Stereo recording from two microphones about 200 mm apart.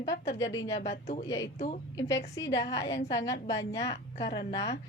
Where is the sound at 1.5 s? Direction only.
35° left (ahead or behind).